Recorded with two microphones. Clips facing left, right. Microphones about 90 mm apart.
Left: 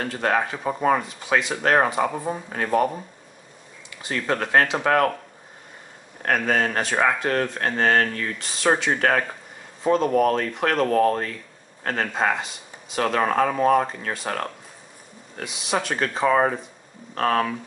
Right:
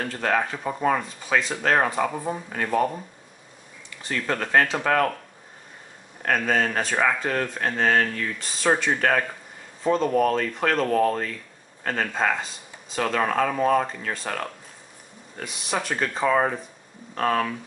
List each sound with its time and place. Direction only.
0.0 s speech: 15° left (ahead or behind)
4.0 s speech: 15° left (ahead or behind)
6.2 s speech: 10° left (ahead or behind)
10.9 s speech: centre (ahead or behind)
12.1 s speech: 15° left (ahead or behind)
15.9 s speech: centre (ahead or behind)